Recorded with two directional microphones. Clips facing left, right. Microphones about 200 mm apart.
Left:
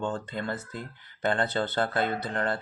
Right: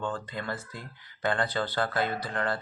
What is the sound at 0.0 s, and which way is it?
Speech, 25° left (ahead or behind).